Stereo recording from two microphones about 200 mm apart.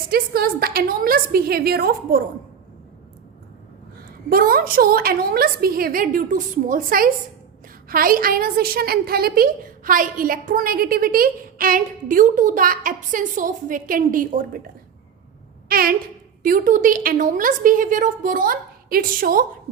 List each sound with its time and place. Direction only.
0.1 s a woman's voice: 50° right (ahead or behind)
4.3 s a woman's voice: 45° right (ahead or behind)
15.7 s a woman's voice: 45° right (ahead or behind)